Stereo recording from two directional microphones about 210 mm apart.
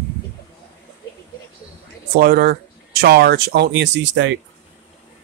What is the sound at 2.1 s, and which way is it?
Speech, 45° right (ahead or behind).